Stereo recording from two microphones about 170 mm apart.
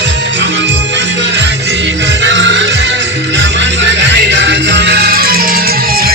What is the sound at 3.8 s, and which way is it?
Music, 90° right.